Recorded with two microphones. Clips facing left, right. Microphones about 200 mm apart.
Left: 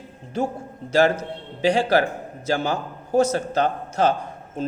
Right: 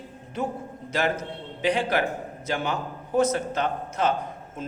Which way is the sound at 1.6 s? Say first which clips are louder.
Left 5 dB; 35° left (ahead or behind).